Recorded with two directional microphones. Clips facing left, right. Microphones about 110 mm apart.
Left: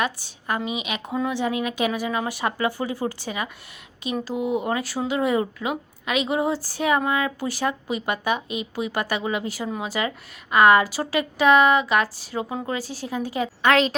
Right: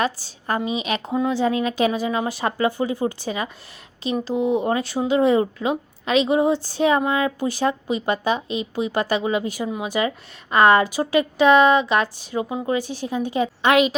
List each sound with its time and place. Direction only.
0.0 s a woman's voice: 30° right (ahead or behind)